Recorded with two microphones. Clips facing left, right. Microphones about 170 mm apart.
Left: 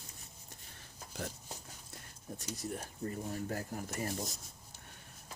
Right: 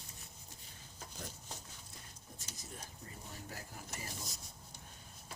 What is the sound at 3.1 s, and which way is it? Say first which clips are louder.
Speech: left 13 dB; 50° left (ahead or behind).